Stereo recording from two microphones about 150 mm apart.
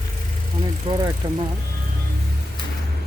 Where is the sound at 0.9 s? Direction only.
30° right (ahead or behind).